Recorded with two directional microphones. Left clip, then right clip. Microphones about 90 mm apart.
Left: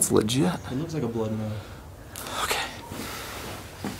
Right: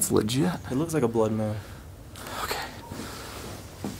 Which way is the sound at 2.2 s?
Centre (ahead or behind).